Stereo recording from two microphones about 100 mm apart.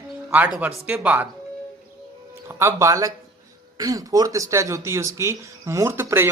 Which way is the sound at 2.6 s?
30° right (ahead or behind).